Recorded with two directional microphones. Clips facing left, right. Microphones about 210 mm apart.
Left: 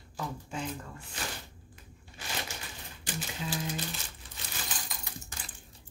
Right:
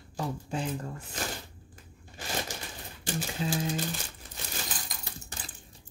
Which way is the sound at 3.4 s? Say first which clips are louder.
Right 5 dB; 30° right (ahead or behind).